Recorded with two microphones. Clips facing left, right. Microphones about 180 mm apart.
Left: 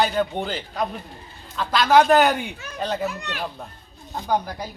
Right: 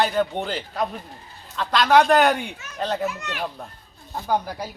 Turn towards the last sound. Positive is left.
turn(degrees=-5)  # may be behind; listen again after turning